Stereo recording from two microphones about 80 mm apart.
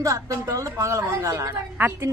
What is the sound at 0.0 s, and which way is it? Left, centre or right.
A woman's voice, right.